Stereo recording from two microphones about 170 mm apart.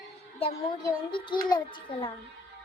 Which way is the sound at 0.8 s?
25° left (ahead or behind).